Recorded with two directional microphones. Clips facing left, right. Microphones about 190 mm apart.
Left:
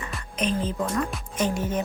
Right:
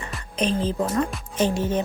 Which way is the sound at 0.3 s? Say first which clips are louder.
Right 3 dB; 30° right (ahead or behind).